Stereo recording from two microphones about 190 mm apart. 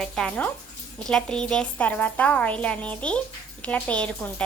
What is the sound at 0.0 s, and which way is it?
A woman's voice, 5° left (ahead or behind).